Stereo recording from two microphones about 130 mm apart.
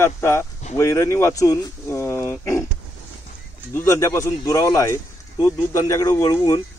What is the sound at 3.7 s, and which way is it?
Speech, 25° left (ahead or behind).